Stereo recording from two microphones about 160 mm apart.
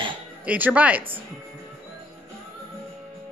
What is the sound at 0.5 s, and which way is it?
Speech, 10° right (ahead or behind).